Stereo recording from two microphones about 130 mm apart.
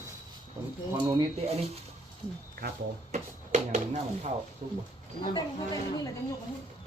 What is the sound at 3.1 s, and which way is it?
Speech, 65° right (ahead or behind).